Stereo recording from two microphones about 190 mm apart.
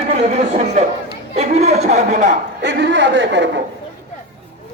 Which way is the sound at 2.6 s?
70° right (ahead or behind).